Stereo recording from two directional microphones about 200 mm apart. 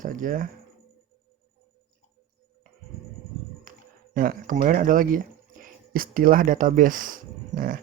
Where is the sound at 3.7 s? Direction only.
45° right (ahead or behind).